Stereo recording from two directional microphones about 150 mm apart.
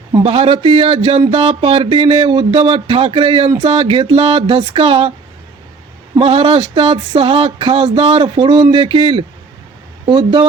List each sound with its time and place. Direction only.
0.1 s speech: 35° right (ahead or behind)
6.1 s speech: 35° right (ahead or behind)